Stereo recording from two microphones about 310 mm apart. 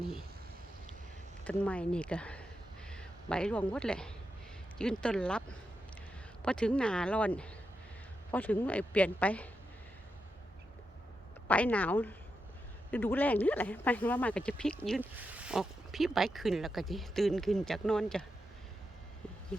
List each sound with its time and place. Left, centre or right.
1.5 s speech: centre
11.4 s speech: centre